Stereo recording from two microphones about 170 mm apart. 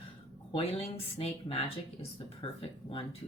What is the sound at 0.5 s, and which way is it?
Speech, 35° left (ahead or behind).